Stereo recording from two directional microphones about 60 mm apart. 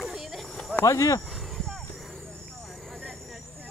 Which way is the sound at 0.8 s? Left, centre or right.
Left.